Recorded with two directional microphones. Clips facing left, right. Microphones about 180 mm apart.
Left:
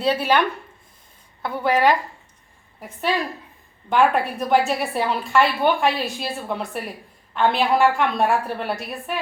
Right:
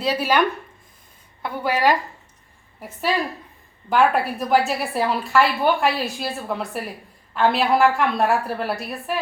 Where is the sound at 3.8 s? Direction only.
Centre (ahead or behind).